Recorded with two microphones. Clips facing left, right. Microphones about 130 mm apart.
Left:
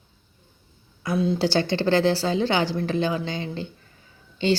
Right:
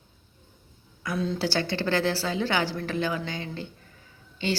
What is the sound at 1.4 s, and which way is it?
A woman's voice, 25° left (ahead or behind).